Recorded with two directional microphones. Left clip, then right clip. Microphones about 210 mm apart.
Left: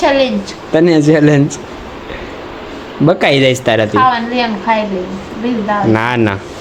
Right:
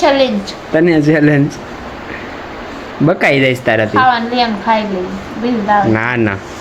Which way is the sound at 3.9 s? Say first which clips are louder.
Even; centre (ahead or behind).